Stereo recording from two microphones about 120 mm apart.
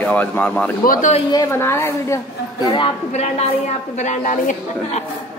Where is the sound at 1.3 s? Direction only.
25° left (ahead or behind).